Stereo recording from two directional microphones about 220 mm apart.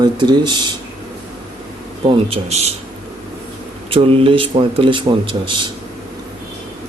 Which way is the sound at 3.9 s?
25° right (ahead or behind).